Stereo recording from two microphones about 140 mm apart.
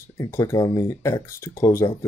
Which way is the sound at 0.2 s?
20° left (ahead or behind).